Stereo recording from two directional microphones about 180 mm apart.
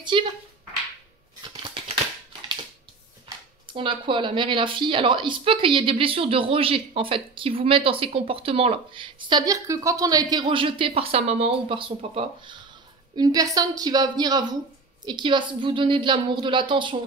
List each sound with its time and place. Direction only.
0.1 s speech: 30° right (ahead or behind)
3.6 s speech: 25° right (ahead or behind)